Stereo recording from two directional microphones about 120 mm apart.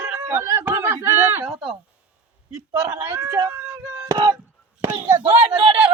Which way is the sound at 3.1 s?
25° right (ahead or behind).